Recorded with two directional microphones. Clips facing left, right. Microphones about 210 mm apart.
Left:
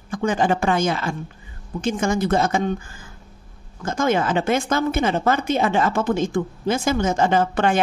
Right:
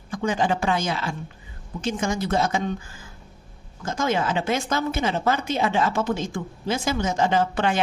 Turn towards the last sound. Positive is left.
turn(degrees=50)  # may be behind; listen again after turning